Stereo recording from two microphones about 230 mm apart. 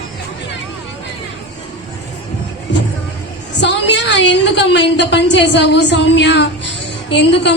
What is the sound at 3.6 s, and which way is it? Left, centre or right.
A woman's voice, left.